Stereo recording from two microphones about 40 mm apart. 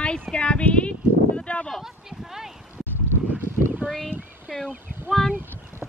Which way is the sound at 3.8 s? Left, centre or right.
Right.